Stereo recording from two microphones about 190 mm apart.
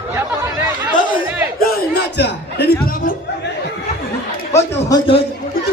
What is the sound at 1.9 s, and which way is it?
Music, 60° left (ahead or behind).